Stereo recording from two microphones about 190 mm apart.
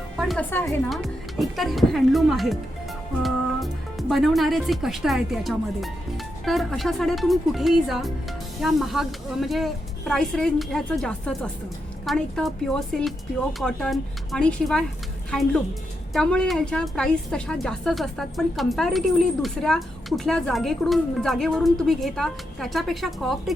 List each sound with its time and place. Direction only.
0.2 s a woman's voice: 5° left (ahead or behind)